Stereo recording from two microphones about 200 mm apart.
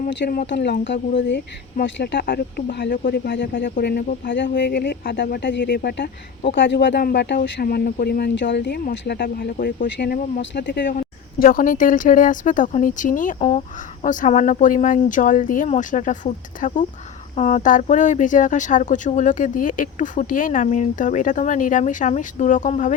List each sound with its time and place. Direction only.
0.4 s speech: 60° left (ahead or behind)
2.0 s speech: 50° left (ahead or behind)
10.8 s speech: 45° left (ahead or behind)